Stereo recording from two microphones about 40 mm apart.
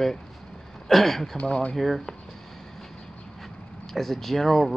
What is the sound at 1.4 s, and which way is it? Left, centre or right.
Speech, left.